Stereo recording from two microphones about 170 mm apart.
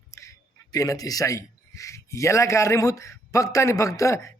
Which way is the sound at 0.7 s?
20° left (ahead or behind).